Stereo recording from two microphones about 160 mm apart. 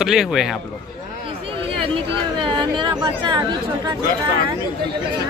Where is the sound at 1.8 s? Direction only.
35° right (ahead or behind).